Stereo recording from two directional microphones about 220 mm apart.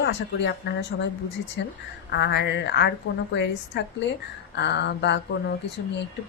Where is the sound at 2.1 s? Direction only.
50° left (ahead or behind).